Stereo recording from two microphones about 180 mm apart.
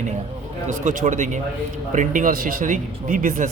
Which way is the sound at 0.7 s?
45° right (ahead or behind).